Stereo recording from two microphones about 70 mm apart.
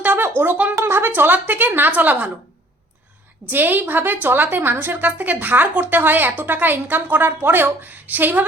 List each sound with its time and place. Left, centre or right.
0.0 s a woman's voice: right
3.5 s a woman's voice: right